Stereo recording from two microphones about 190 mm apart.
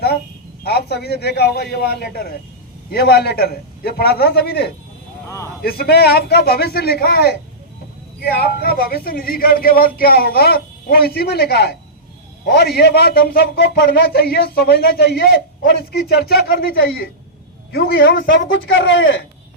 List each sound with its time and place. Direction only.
0.6 s a man's voice: 55° left (ahead or behind)
18.7 s speech: 70° left (ahead or behind)